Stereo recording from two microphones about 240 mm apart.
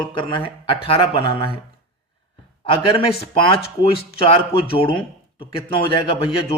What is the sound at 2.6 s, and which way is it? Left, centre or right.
A man's voice, left.